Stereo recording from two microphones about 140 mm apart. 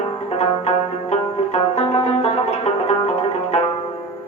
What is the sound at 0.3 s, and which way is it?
Music, 50° left (ahead or behind).